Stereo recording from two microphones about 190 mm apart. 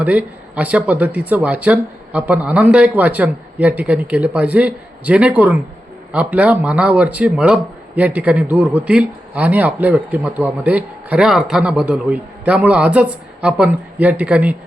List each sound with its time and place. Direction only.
0.0 s speech: 5° right (ahead or behind)